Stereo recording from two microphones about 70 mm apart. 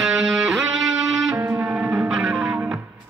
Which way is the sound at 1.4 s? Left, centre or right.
Right.